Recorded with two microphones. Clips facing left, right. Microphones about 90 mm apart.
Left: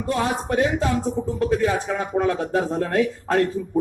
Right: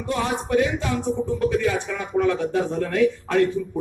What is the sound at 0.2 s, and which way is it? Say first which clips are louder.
Speech: right 1 dB; 40° left (ahead or behind).